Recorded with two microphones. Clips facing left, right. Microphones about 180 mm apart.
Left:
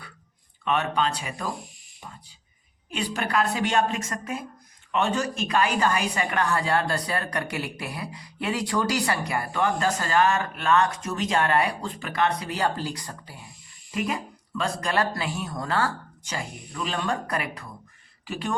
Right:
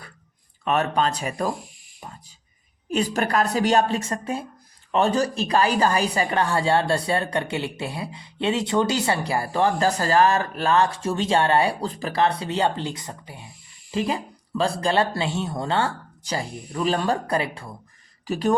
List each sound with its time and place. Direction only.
0.6 s a woman's voice: 40° right (ahead or behind)
2.9 s a woman's voice: 40° right (ahead or behind)
18.3 s a woman's voice: 40° right (ahead or behind)